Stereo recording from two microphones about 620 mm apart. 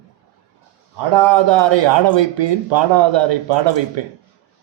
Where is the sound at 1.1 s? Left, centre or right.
Right.